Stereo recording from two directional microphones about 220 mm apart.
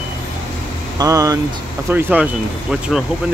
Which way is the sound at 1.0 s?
15° right (ahead or behind).